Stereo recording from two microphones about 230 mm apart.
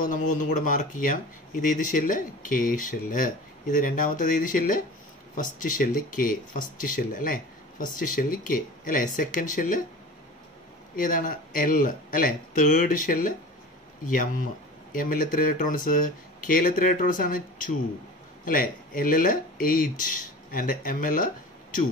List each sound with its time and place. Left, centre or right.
0.0 s speech: left
11.0 s speech: left